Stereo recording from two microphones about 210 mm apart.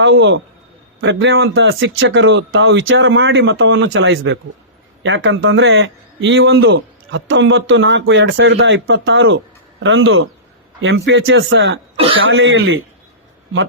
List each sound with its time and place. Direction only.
0.0 s a man's voice: 60° right (ahead or behind)